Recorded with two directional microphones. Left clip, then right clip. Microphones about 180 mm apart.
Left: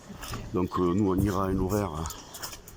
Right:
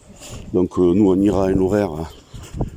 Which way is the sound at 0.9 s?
55° right (ahead or behind).